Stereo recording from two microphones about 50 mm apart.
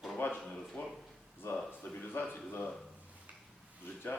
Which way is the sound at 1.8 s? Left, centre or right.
Left.